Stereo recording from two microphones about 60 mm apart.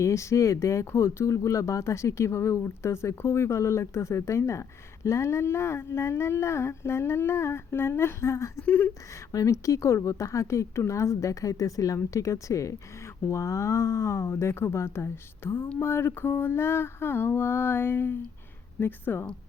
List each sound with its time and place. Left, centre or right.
0.0 s speech: left
8.6 s speech: left
9.3 s speech: left
15.8 s mantra: left